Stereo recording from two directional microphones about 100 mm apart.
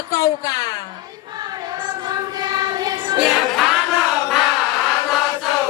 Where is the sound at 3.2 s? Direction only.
5° right (ahead or behind).